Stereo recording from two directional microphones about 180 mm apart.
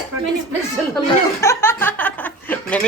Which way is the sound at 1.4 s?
15° left (ahead or behind).